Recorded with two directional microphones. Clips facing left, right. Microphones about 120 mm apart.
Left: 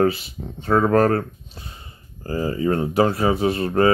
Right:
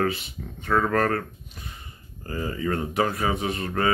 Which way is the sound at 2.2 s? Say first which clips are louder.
Left 6 dB; 30° left (ahead or behind).